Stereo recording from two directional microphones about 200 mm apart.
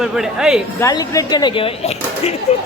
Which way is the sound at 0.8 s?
15° left (ahead or behind).